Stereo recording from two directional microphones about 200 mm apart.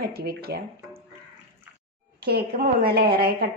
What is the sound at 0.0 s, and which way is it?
Speech, 50° right (ahead or behind).